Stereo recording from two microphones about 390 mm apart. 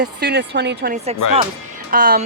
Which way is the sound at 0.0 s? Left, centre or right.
Right.